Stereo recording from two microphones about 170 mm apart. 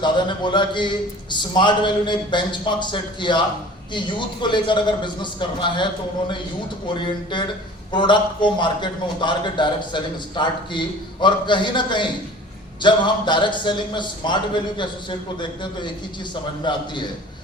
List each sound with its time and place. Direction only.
0.0 s a man's voice: 25° left (ahead or behind)